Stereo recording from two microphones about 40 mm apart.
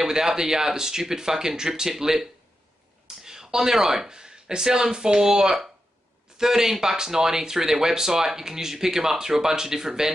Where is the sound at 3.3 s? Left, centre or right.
Centre.